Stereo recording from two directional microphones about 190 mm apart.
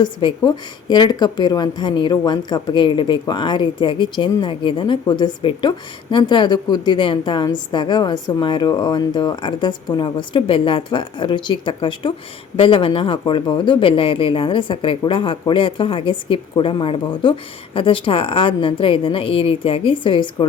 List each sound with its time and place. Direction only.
0.0 s a woman's voice: 25° left (ahead or behind)